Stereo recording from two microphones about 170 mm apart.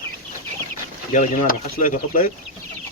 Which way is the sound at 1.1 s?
50° left (ahead or behind).